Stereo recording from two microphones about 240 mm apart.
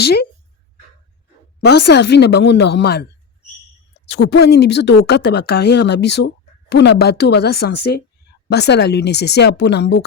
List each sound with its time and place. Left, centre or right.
0.0 s speech: left
1.6 s speech: left